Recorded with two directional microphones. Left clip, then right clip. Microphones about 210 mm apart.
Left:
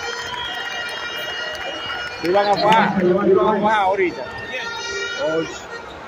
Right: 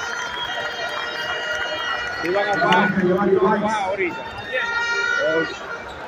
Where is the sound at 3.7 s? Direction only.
30° left (ahead or behind).